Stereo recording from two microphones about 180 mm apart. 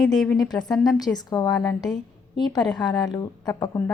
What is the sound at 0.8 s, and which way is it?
Speech, 20° left (ahead or behind).